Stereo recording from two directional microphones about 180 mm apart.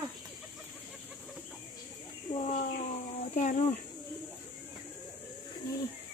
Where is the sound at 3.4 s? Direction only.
40° left (ahead or behind).